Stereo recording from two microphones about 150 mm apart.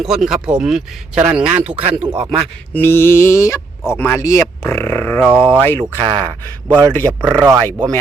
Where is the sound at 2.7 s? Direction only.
15° left (ahead or behind).